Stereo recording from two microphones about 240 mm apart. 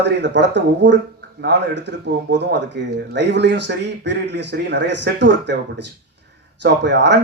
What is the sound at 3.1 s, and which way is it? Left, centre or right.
Speech, right.